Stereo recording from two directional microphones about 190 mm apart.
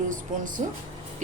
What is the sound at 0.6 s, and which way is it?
Speech, 35° right (ahead or behind).